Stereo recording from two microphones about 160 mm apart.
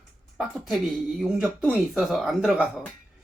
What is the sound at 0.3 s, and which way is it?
Speech, centre (ahead or behind).